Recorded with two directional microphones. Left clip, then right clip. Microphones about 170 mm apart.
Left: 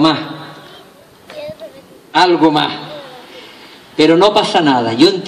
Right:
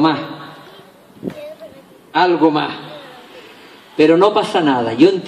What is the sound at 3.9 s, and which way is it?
A man's voice, 40° left (ahead or behind).